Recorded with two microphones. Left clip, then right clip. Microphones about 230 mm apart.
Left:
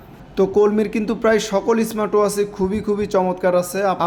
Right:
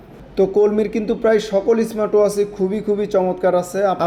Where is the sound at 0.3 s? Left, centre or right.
Centre.